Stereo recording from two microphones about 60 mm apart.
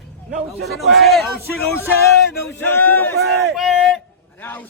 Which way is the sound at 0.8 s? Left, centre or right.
Centre.